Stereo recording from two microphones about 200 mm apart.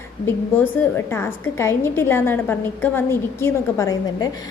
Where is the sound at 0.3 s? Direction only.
10° left (ahead or behind).